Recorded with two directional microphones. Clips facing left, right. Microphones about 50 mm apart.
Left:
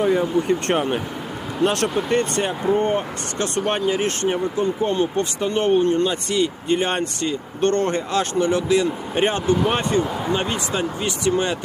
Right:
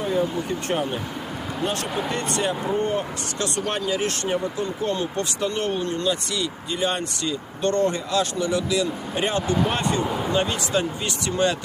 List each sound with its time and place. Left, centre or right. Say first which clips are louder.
0.0 s speech: left 5 dB; left
1.6 s speech: left 8 dB; left
2.0 s speech: left 4 dB; left
10.0 s speech: left 2 dB; centre
10.3 s speech: right 2 dB; centre